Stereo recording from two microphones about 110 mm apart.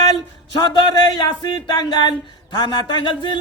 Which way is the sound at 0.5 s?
40° left (ahead or behind).